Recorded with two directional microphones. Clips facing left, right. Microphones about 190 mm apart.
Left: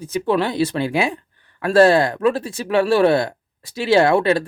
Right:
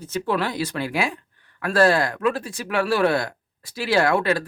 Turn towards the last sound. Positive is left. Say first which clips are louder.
# left 5 dB
turn(degrees=25)  # may be behind; listen again after turning